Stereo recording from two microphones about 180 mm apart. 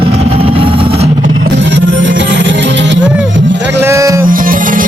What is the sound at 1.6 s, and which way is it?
Music, 90° right.